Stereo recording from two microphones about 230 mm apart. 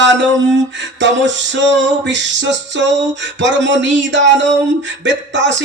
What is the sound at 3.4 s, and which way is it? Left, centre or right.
Music, right.